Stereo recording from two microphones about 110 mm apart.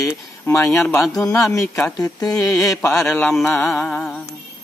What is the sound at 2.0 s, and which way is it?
Music, 35° left (ahead or behind).